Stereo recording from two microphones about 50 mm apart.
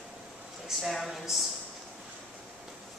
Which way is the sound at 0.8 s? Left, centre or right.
Centre.